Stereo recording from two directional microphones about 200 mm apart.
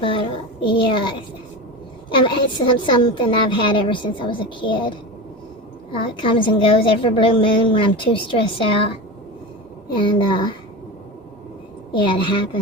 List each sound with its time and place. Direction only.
0.0 s a woman's voice: 25° left (ahead or behind)
2.2 s a woman's voice: 25° left (ahead or behind)
9.9 s a woman's voice: 25° left (ahead or behind)
11.9 s a woman's voice: 25° left (ahead or behind)